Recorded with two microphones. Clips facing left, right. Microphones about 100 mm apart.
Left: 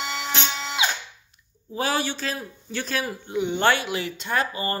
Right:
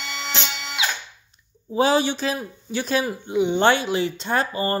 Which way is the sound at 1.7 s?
20° right (ahead or behind).